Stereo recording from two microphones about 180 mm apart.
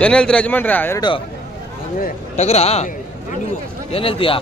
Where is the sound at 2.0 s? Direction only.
40° left (ahead or behind).